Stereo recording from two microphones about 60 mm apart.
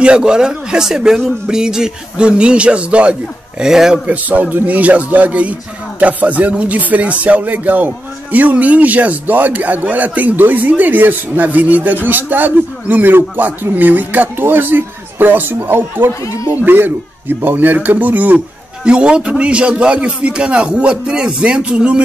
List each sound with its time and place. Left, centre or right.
0.0 s speech: centre
3.6 s speech: centre
4.1 s a man's voice: right
18.9 s speech: centre